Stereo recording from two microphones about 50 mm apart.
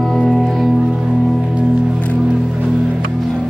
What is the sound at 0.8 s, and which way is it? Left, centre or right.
Music, centre.